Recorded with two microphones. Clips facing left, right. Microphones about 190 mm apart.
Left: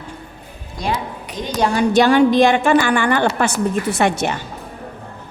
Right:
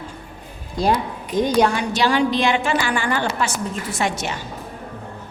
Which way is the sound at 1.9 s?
55° left (ahead or behind).